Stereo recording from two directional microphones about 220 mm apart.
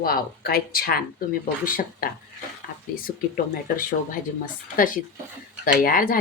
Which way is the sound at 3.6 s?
40° left (ahead or behind).